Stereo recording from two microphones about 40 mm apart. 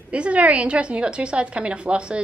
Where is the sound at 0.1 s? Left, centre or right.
Right.